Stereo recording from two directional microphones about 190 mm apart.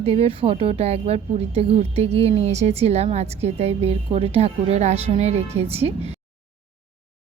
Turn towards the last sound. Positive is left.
turn(degrees=-35)  # may be behind; listen again after turning